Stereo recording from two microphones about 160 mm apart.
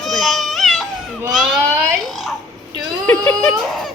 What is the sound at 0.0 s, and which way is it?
Baby cry, centre (ahead or behind).